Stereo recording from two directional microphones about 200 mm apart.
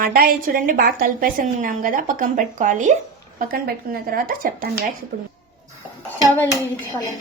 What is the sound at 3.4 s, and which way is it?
A woman's voice, 50° right (ahead or behind).